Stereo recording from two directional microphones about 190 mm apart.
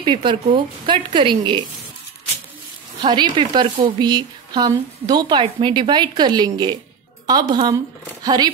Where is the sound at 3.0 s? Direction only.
25° right (ahead or behind).